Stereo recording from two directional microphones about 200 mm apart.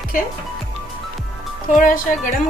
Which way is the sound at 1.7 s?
40° left (ahead or behind).